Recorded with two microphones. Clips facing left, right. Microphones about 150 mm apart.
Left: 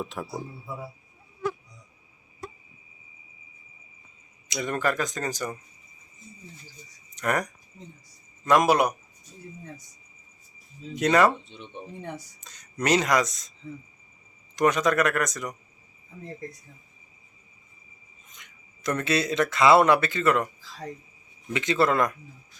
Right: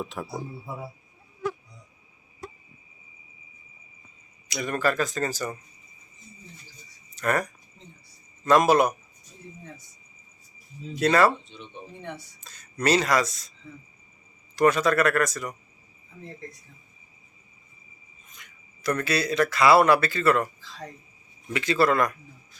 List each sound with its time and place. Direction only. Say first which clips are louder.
0.0 s speech: even; centre (ahead or behind)
4.4 s speech: right 1 dB; 20° left (ahead or behind)
7.2 s speech: right 1 dB; 15° left (ahead or behind)
10.9 s speech: even; 15° left (ahead or behind)
12.4 s speech: right 2 dB; 20° left (ahead or behind)
14.5 s speech: right 1 dB; 15° left (ahead or behind)
18.3 s speech: right 1 dB; 20° left (ahead or behind)
21.5 s speech: right 1 dB; 20° left (ahead or behind)